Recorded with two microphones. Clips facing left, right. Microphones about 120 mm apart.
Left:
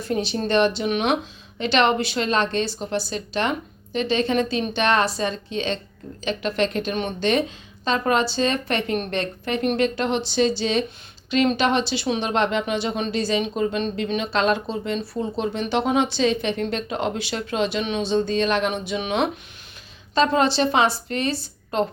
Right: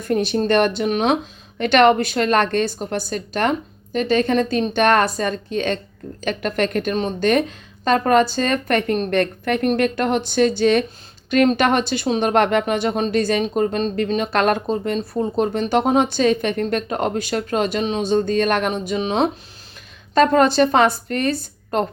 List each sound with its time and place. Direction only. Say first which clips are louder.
0.0 s speech: right 5 dB; 50° right (ahead or behind)
18.7 s speech: right 3 dB; 35° right (ahead or behind)
20.1 s speech: right 5 dB; 50° right (ahead or behind)